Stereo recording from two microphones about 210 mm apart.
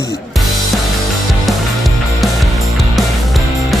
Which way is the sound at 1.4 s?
Centre (ahead or behind).